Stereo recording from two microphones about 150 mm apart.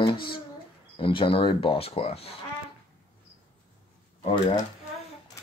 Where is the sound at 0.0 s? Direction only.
35° left (ahead or behind).